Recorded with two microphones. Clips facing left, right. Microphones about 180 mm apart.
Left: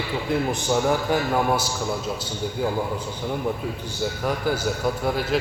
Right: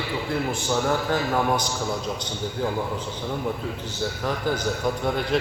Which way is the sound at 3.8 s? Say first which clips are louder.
Left 2 dB; 10° left (ahead or behind).